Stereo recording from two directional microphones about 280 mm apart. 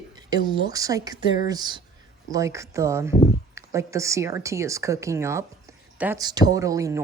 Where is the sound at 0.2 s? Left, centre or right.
Centre.